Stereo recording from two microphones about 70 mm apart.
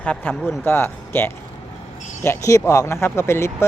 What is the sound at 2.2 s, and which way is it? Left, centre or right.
Speech, left.